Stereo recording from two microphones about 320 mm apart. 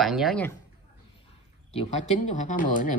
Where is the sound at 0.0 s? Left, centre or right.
Centre.